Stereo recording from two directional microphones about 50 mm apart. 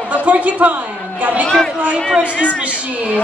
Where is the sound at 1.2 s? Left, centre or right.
Right.